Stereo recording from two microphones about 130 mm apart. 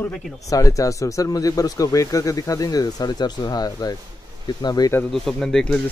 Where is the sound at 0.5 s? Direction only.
25° left (ahead or behind).